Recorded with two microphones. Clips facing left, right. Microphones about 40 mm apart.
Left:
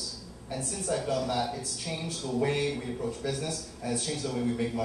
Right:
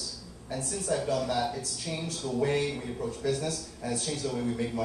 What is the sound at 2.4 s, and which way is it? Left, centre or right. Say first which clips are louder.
Speech: right 1 dB; centre.